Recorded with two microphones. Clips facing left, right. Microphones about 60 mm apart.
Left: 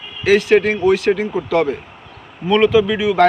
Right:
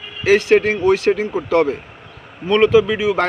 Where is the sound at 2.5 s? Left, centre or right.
Right.